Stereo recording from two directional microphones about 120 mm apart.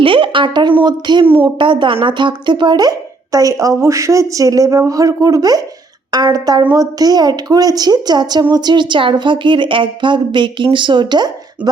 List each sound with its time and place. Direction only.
0.0 s a woman's voice: 45° right (ahead or behind)